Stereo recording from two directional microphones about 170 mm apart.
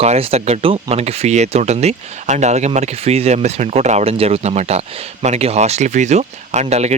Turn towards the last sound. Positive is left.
turn(degrees=-40)  # may be behind; listen again after turning